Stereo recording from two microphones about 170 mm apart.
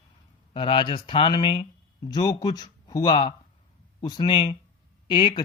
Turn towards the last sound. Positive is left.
turn(degrees=25)  # may be behind; listen again after turning